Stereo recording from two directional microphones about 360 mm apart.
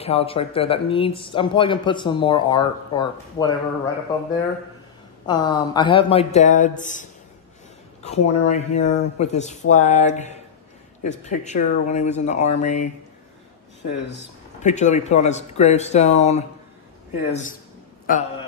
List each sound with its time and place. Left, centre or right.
0.0 s a man's voice: centre
5.2 s a man's voice: centre
8.5 s speech: centre
14.0 s speech: left